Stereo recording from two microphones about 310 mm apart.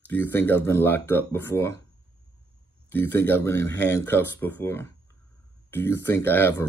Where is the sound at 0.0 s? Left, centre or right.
Centre.